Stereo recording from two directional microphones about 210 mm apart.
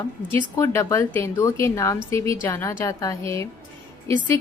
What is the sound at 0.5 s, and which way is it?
A woman's voice, 15° left (ahead or behind).